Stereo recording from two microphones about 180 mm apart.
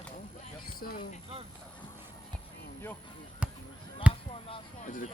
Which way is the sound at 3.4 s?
5° right (ahead or behind).